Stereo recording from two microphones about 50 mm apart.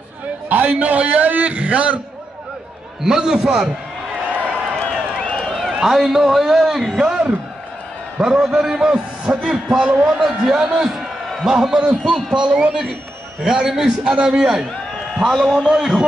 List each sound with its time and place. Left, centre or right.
0.5 s a man's voice: right
3.0 s a man's voice: centre
4.3 s a sound: right
5.5 s a sound: centre
5.8 s a man's voice: centre
13.7 s a man's voice: centre
15.0 s a man's voice: centre
15.6 s a man's voice: centre